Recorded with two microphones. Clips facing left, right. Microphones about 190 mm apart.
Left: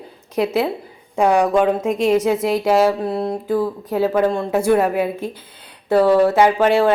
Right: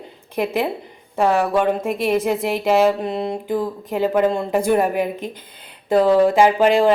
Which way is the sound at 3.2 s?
20° right (ahead or behind).